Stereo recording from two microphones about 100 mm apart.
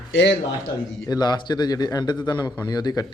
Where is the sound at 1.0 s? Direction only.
40° left (ahead or behind).